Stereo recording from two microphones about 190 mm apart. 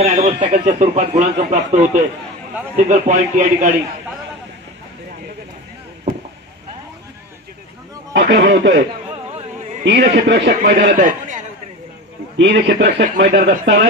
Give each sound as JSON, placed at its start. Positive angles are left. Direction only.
{"t": 0.0, "sound": "speech", "side_deg": -35}
{"t": 8.1, "sound": "speech", "side_deg": -60}
{"t": 10.1, "sound": "a man's voice", "side_deg": -65}
{"t": 12.4, "sound": "a man's voice", "side_deg": -65}